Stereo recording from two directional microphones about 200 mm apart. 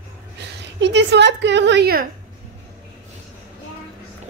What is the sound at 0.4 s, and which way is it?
A woman's voice, 60° right (ahead or behind).